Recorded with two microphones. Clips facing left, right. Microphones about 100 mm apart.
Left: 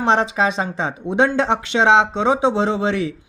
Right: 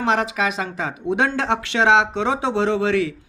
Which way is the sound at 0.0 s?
25° left (ahead or behind).